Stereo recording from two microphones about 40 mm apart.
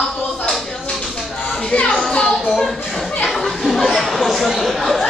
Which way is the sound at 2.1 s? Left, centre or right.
Centre.